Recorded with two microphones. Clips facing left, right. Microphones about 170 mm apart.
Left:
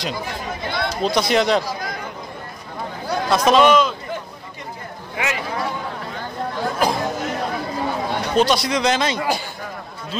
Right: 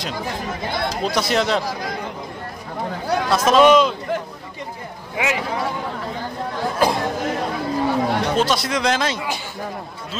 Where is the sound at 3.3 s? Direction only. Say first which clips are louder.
Right 1 dB; centre (ahead or behind).